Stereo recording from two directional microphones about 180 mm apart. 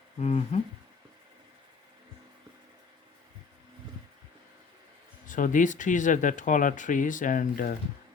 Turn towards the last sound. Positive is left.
turn(degrees=50)  # may be behind; listen again after turning